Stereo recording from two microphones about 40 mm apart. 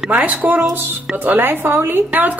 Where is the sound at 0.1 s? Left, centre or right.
Right.